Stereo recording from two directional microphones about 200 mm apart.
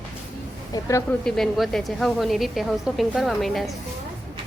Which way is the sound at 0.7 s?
15° left (ahead or behind).